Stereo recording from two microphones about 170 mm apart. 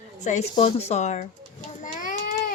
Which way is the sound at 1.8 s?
50° left (ahead or behind).